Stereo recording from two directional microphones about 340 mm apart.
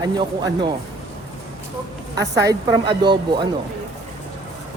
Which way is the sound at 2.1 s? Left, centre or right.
Centre.